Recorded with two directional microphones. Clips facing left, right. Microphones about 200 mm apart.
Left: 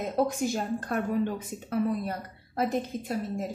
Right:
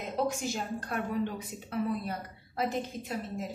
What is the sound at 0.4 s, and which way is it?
A woman's voice, 50° left (ahead or behind).